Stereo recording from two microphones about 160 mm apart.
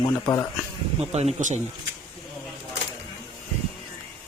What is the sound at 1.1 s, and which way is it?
Speech, 40° right (ahead or behind).